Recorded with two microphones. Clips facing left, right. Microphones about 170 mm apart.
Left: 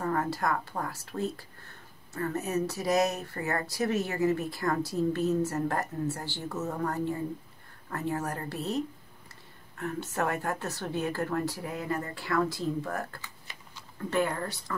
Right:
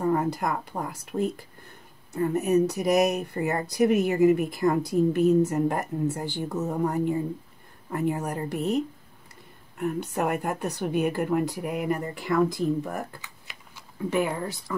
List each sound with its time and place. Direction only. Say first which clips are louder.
0.0 s a woman's voice: right 5 dB; 15° right (ahead or behind)